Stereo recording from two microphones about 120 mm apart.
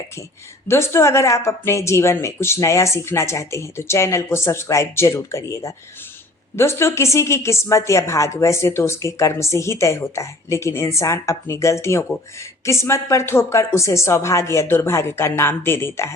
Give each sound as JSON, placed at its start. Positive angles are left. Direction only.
{"t": 0.7, "sound": "speech", "side_deg": 20}